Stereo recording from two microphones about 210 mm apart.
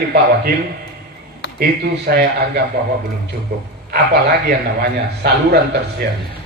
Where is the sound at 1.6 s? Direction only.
50° right (ahead or behind).